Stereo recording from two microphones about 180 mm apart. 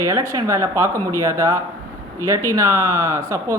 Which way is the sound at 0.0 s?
15° right (ahead or behind).